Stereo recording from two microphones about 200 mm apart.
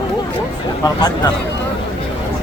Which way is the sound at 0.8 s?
20° left (ahead or behind).